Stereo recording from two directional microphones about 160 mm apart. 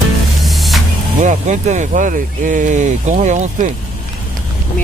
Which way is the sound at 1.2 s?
50° right (ahead or behind).